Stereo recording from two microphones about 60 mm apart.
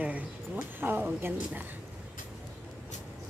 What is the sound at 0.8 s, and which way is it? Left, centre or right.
Speech, right.